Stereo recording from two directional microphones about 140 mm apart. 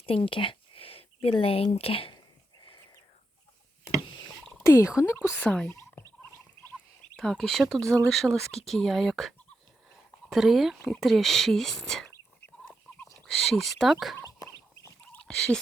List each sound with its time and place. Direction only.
0.0 s speech: 40° left (ahead or behind)
2.6 s a sound: 30° left (ahead or behind)
4.6 s a woman's voice: 15° left (ahead or behind)
5.7 s fowl: 15° left (ahead or behind)
7.2 s speech: 5° left (ahead or behind)
10.3 s speech: centre (ahead or behind)
13.1 s speech: 5° left (ahead or behind)
14.2 s chicken: 25° left (ahead or behind)